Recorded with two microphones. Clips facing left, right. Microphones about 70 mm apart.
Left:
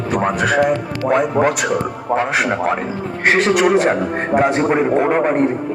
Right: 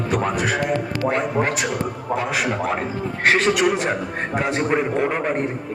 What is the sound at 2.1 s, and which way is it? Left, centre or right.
Speech, left.